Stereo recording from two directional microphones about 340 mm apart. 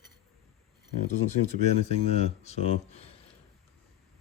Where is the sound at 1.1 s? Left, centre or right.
Centre.